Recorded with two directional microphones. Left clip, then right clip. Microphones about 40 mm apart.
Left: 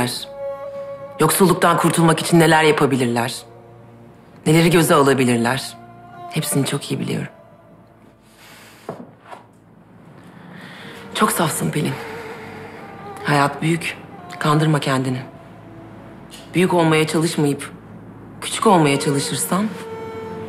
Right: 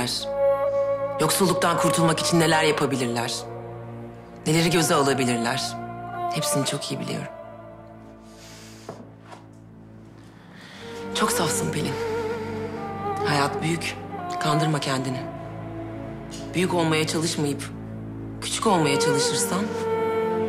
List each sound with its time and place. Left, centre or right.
0.0 s speech: right
0.4 s music: left
1.1 s speech: right
8.8 s wood: right
10.8 s music: right
13.1 s speech: right
16.3 s speech: right
19.9 s music: left